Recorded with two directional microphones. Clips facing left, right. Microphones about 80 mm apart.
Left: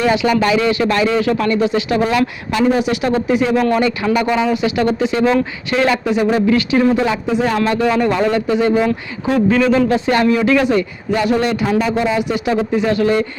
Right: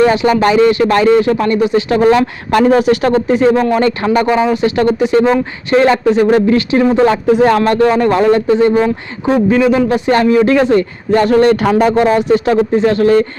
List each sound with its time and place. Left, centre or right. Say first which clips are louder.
0.0 s speech: right 4 dB; right
1.1 s speech: right 5 dB; right
2.5 s speech: right 7 dB; right
3.2 s speech: right 3 dB; right
6.7 s speech: right 2 dB; right
7.0 s speech: right 7 dB; right
9.5 s speech: right 2 dB; centre
9.9 s speech: right 4 dB; right
12.7 s speech: right 4 dB; right